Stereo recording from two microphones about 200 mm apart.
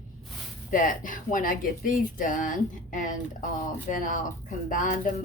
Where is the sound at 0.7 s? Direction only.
40° left (ahead or behind).